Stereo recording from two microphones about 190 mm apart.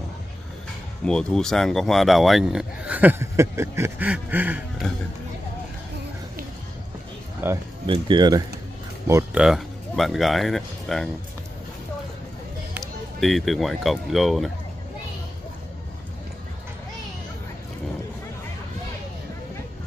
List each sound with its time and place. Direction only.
1.0 s speech: 5° left (ahead or behind)
7.4 s speech: 10° right (ahead or behind)
7.8 s speech: 25° right (ahead or behind)
9.4 s speech: centre (ahead or behind)
12.7 s speech: centre (ahead or behind)